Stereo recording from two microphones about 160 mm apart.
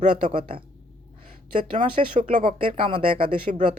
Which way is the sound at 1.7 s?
55° right (ahead or behind).